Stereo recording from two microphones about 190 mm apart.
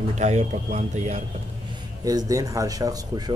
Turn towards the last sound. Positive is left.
turn(degrees=-20)  # may be behind; listen again after turning